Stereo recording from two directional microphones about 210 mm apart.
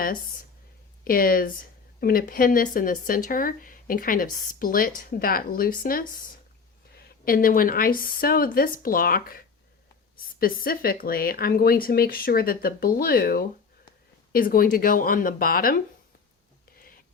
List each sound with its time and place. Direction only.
0.0 s speech: 45° left (ahead or behind)
7.3 s speech: 40° left (ahead or behind)
10.4 s speech: 45° left (ahead or behind)